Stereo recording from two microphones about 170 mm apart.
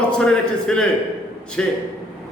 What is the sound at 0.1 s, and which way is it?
A man's voice, 5° left (ahead or behind).